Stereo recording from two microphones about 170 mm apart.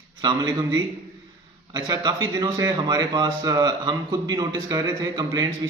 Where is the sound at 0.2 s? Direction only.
25° right (ahead or behind).